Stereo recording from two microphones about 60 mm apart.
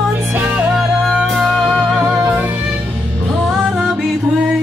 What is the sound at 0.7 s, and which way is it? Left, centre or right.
Music, centre.